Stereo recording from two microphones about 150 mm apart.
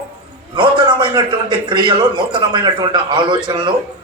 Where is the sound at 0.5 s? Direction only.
30° right (ahead or behind).